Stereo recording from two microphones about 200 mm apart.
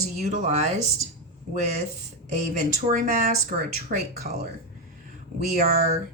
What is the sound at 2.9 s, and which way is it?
Speech, 45° right (ahead or behind).